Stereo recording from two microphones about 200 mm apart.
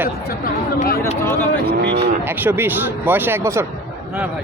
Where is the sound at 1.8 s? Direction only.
60° right (ahead or behind).